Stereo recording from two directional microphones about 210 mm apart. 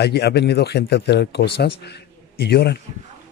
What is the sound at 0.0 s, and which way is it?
A man's voice, 50° left (ahead or behind).